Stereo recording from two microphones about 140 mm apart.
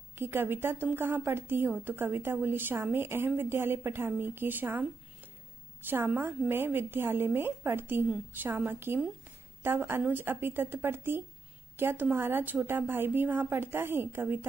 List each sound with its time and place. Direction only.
0.1 s a woman's voice: 15° right (ahead or behind)
5.9 s a woman's voice: 15° right (ahead or behind)